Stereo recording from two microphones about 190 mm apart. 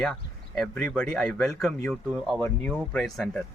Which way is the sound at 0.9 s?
5° left (ahead or behind).